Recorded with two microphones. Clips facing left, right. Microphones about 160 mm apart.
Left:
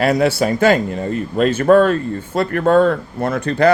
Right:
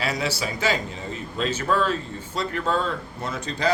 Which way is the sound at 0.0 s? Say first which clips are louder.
Left 12 dB; 55° left (ahead or behind).